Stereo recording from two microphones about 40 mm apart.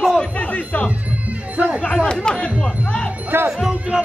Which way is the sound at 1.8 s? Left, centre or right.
Left.